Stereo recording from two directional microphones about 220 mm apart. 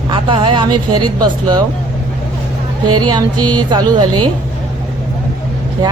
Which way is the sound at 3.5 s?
20° right (ahead or behind).